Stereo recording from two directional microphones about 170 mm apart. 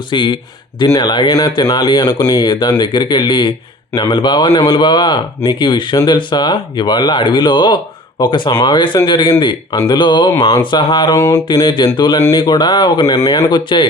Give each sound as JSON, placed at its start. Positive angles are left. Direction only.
{"t": 0.1, "sound": "speech", "side_deg": 30}